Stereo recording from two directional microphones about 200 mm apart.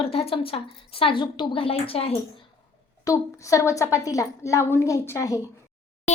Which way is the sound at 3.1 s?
15° left (ahead or behind).